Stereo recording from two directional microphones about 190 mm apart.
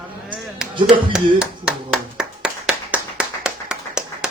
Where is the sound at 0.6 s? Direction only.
5° right (ahead or behind).